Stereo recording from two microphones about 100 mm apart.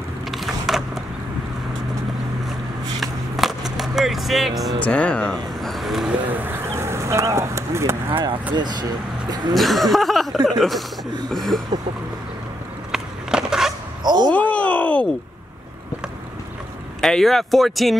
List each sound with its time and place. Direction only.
0.3 s a sound: centre (ahead or behind)
3.0 s skateboard: centre (ahead or behind)
4.7 s speech: 10° left (ahead or behind); by 6.1 s 5° right (ahead or behind)
6.2 s a sound: 20° right (ahead or behind)
8.5 s speech: 45° right (ahead or behind)
9.5 s speech: centre (ahead or behind)
12.9 s skateboard: 5° right (ahead or behind)
14.0 s speech: 45° right (ahead or behind)
14.3 s groan: 15° left (ahead or behind)
17.0 s speech: 5° left (ahead or behind)